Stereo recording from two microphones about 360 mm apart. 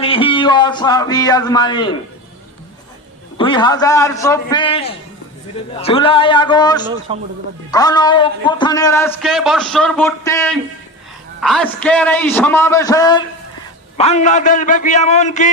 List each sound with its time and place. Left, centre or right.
0.0 s a man's voice: centre
3.3 s a man's voice: centre
7.1 s speech: centre
7.7 s a man's voice: centre